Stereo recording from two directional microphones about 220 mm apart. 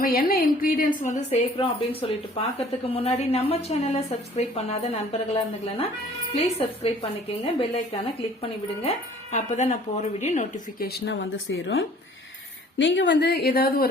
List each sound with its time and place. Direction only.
0.0 s a woman's voice: 40° left (ahead or behind)